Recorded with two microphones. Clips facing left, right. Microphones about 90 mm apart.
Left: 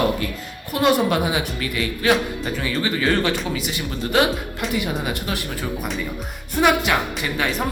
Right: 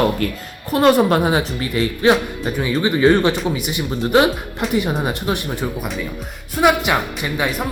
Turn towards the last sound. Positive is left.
turn(degrees=-15)  # may be behind; listen again after turning